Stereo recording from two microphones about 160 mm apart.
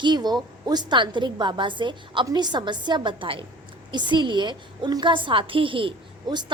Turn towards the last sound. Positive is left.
turn(degrees=-30)  # may be behind; listen again after turning